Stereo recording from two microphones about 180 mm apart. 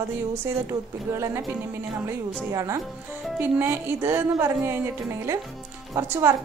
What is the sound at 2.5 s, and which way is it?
A woman's voice, 15° right (ahead or behind).